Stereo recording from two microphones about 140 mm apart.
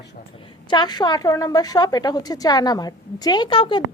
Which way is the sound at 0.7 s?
30° left (ahead or behind).